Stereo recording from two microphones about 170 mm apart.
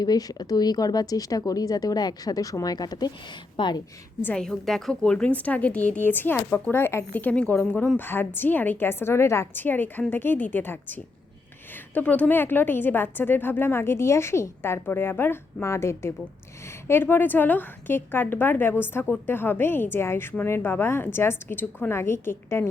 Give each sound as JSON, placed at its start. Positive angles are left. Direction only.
{"t": 0.0, "sound": "speech", "side_deg": 20}
{"t": 4.2, "sound": "a woman's voice", "side_deg": 5}